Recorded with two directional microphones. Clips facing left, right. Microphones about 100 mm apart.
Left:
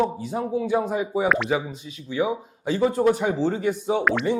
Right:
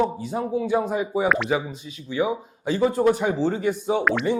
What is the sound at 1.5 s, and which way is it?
Speech, 15° right (ahead or behind).